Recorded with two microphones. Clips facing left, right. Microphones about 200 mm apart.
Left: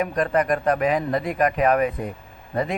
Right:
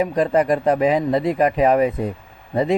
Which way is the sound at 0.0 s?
25° right (ahead or behind).